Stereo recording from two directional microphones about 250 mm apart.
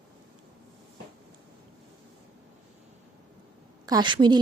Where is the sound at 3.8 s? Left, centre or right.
Centre.